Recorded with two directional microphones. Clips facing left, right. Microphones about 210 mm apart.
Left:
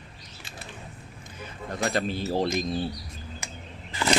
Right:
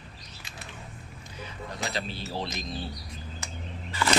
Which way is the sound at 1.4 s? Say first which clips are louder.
Left 6 dB; 50° left (ahead or behind).